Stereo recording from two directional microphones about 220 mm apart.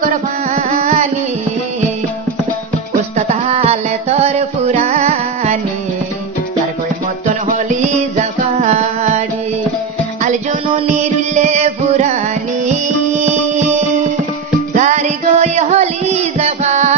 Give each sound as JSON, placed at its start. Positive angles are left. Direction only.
{"t": 0.0, "sound": "carnatic music", "side_deg": -35}
{"t": 3.2, "sound": "music", "side_deg": -30}
{"t": 7.4, "sound": "music", "side_deg": -35}
{"t": 11.3, "sound": "music", "side_deg": -30}